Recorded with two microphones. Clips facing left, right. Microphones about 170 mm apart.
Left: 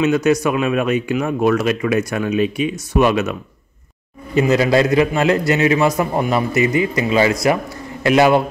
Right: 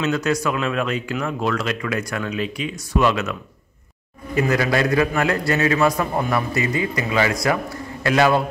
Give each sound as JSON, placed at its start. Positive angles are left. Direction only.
{"t": 0.0, "sound": "speech", "side_deg": 20}
{"t": 4.4, "sound": "speech", "side_deg": 25}